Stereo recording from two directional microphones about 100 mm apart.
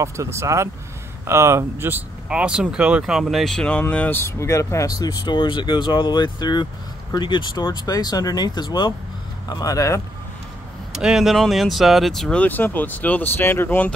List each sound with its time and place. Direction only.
0.0 s speech: 30° right (ahead or behind)
2.2 s speech: 10° right (ahead or behind); by 10.0 s 35° left (ahead or behind)
10.9 s speech: 5° right (ahead or behind); by 13.9 s 20° left (ahead or behind)